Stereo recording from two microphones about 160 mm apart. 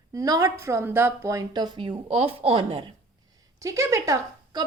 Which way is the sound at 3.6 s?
20° right (ahead or behind).